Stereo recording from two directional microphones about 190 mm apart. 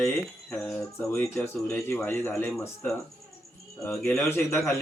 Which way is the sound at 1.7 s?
15° left (ahead or behind).